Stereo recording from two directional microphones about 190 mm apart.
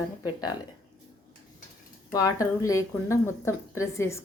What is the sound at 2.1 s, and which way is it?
Speech, 15° left (ahead or behind).